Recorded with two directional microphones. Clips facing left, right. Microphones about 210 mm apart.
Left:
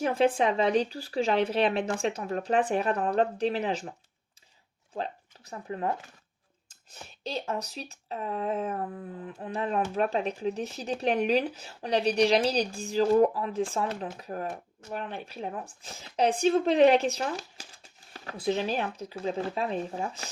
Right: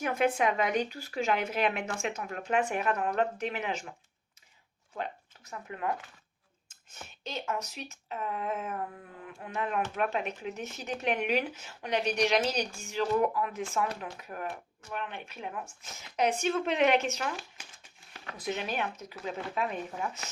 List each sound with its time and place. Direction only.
0.0 s speech: 30° left (ahead or behind)
4.9 s speech: 30° left (ahead or behind)